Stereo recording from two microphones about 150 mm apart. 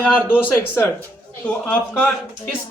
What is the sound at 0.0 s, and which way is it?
Speech, 10° left (ahead or behind).